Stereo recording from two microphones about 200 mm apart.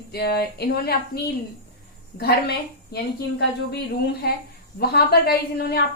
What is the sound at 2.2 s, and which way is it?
Speech, 50° left (ahead or behind).